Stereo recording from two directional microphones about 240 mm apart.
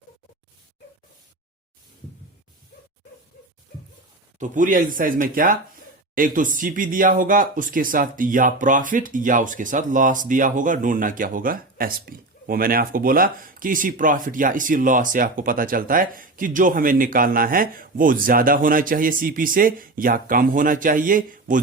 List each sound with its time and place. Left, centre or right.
4.4 s speech: right